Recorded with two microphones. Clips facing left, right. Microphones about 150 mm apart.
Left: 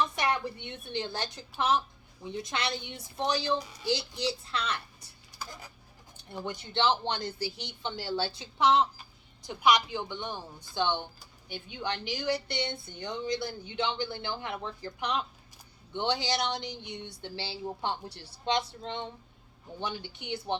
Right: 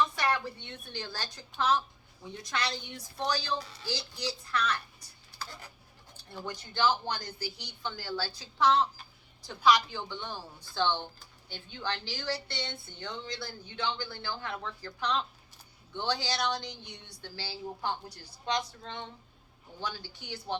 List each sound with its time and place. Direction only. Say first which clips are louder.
0.2 s a child's voice: left 1 dB; 20° left (ahead or behind)